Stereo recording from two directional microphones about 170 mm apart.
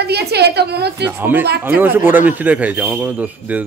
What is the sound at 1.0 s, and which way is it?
Speech, 10° right (ahead or behind).